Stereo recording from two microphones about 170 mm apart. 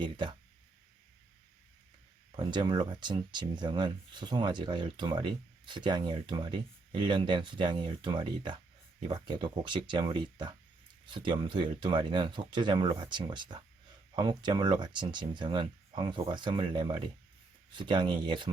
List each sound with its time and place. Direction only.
0.0 s speech: 30° right (ahead or behind)
2.3 s speech: 25° right (ahead or behind)